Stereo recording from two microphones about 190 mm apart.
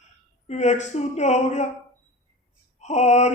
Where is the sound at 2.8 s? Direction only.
40° left (ahead or behind).